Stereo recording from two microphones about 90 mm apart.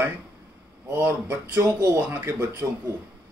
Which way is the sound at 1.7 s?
35° right (ahead or behind).